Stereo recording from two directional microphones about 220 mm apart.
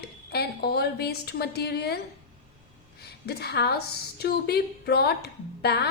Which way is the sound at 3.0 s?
45° left (ahead or behind).